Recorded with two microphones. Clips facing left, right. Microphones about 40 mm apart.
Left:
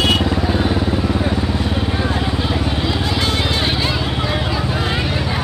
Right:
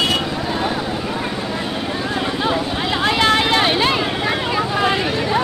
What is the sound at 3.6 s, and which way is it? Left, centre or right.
Vehicle, right.